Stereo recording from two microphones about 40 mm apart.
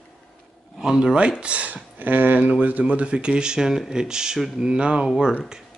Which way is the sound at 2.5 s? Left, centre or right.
Right.